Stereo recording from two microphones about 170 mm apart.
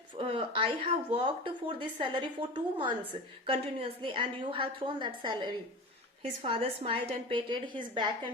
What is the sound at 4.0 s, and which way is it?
A woman's voice, 30° right (ahead or behind).